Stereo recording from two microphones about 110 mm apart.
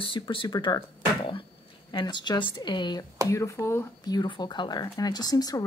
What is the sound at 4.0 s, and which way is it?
Speech, 40° left (ahead or behind).